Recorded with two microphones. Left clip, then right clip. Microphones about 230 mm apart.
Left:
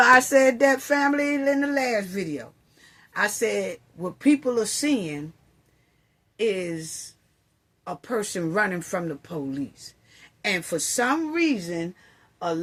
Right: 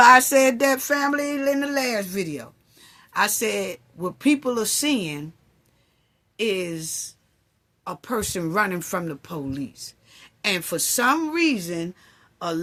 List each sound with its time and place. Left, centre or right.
0.0 s a sound: right
6.3 s speech: right
7.9 s a woman's voice: right